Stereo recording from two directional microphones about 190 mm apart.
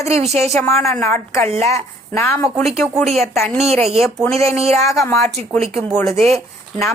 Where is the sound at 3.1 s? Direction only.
35° right (ahead or behind).